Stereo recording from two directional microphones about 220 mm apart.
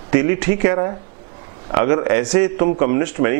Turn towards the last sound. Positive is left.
turn(degrees=-15)  # may be behind; listen again after turning